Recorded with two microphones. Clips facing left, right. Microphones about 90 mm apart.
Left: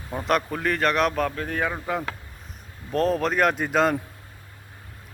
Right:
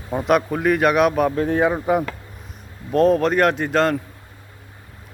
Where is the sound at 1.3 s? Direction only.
25° right (ahead or behind).